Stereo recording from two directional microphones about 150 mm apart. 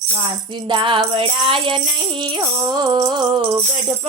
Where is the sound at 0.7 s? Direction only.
35° right (ahead or behind).